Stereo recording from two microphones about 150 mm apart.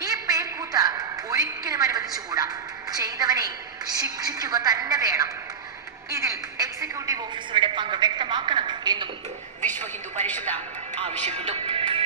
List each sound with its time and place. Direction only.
0.0 s a sound: 25° right (ahead or behind)
2.9 s a woman's voice: 25° right (ahead or behind)
9.6 s speech: 10° left (ahead or behind)
11.0 s speech: 50° right (ahead or behind)